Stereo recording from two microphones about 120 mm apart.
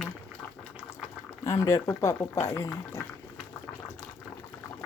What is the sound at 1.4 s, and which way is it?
Speech, 25° left (ahead or behind).